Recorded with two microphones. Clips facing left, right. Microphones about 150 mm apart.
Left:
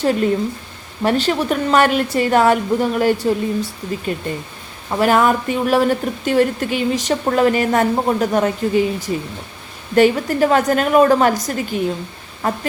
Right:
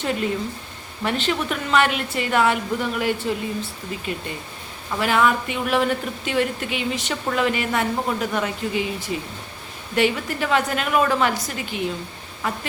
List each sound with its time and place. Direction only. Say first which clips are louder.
1.0 s a woman's voice: left 6 dB; 40° left (ahead or behind)